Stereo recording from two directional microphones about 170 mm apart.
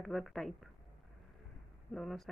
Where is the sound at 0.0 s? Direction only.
Centre (ahead or behind).